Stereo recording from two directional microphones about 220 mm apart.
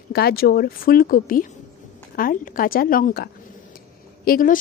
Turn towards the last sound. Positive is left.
turn(degrees=40)  # may be behind; listen again after turning